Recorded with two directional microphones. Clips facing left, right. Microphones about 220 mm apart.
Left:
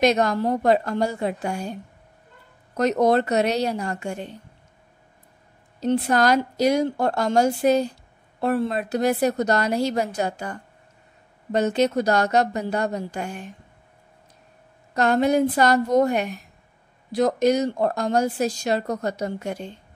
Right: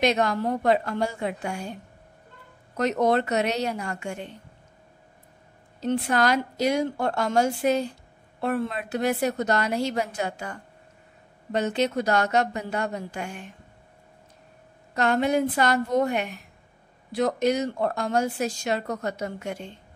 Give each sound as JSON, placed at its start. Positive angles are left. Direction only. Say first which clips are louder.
{"t": 0.0, "sound": "speech", "louder": "left 3 dB", "side_deg": 40}
{"t": 2.8, "sound": "speech", "louder": "left 3 dB", "side_deg": 40}
{"t": 5.8, "sound": "speech", "louder": "left 3 dB", "side_deg": 40}
{"t": 15.0, "sound": "speech", "louder": "left 4 dB", "side_deg": 40}